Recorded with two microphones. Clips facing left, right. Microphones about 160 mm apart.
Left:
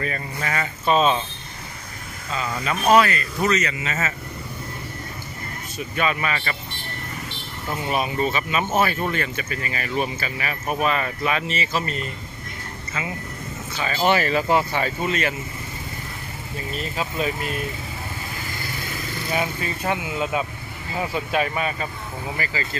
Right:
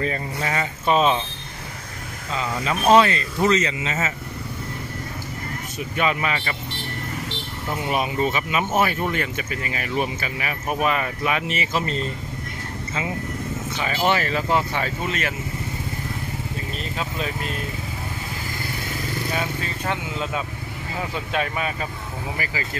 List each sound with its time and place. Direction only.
0.0 s speech: 20° right (ahead or behind)
2.3 s speech: 20° right (ahead or behind)
5.9 s speech: 20° right (ahead or behind)
7.7 s speech: 15° right (ahead or behind)
13.9 s speech: 5° left (ahead or behind)
16.7 s speech: 5° left (ahead or behind)
19.3 s speech: 10° left (ahead or behind)
22.4 s speech: 10° right (ahead or behind)